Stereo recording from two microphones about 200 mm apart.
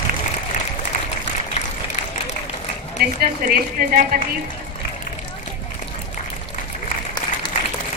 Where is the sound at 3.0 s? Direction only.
50° right (ahead or behind).